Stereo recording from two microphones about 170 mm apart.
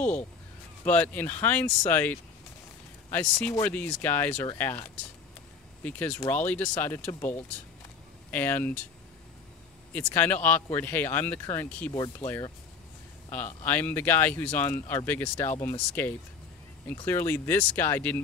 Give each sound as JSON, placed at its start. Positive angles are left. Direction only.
{"t": 0.8, "sound": "speech", "side_deg": 10}
{"t": 5.9, "sound": "speech", "side_deg": 10}
{"t": 9.9, "sound": "speech", "side_deg": 10}
{"t": 13.7, "sound": "speech", "side_deg": 10}